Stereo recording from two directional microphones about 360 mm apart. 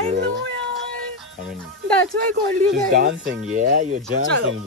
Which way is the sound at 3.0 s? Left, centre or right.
Right.